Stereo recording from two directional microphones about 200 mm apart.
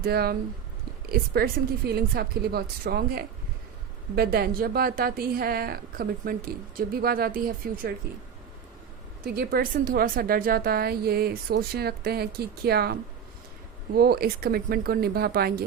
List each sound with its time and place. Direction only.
0.0 s a woman's voice: 50° right (ahead or behind)
9.2 s a woman's voice: 50° right (ahead or behind)